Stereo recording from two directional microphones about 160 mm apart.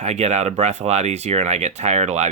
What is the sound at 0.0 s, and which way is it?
Speech, 45° right (ahead or behind).